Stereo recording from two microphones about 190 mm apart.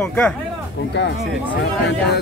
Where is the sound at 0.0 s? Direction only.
5° left (ahead or behind).